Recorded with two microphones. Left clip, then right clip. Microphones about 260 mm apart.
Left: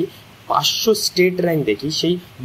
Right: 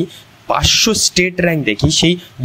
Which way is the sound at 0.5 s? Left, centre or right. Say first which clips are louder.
Right 3 dB; right.